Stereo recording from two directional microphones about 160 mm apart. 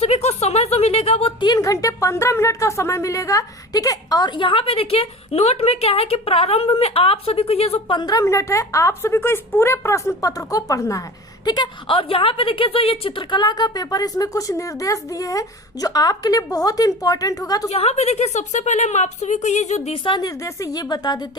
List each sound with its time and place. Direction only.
0.0 s a woman's voice: 40° left (ahead or behind); by 17.7 s 25° left (ahead or behind)
17.7 s a woman's voice: 40° left (ahead or behind)
20.1 s a woman's voice: 25° left (ahead or behind)